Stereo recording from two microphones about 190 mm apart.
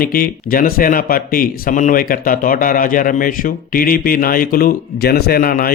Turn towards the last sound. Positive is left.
turn(degrees=50)  # may be behind; listen again after turning